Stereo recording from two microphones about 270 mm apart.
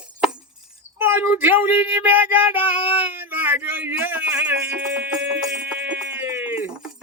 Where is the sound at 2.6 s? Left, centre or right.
Centre.